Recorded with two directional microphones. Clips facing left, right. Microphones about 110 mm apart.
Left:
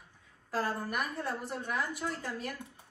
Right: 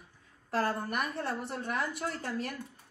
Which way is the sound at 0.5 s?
60° right (ahead or behind).